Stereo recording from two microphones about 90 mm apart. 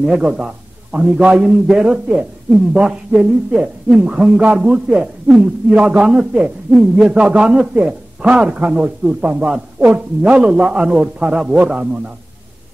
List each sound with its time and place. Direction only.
0.0 s a man's voice: 10° right (ahead or behind)